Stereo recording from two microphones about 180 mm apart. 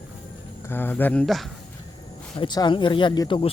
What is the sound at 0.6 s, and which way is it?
Speech, 10° left (ahead or behind).